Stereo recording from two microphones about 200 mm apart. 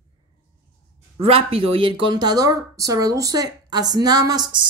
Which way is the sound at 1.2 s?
30° right (ahead or behind).